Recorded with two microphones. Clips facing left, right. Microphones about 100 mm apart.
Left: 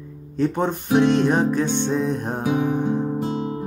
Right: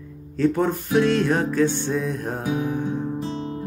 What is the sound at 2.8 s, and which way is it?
Music, 55° left (ahead or behind).